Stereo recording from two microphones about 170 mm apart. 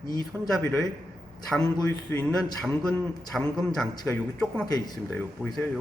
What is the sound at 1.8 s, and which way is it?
A man's voice, 10° left (ahead or behind).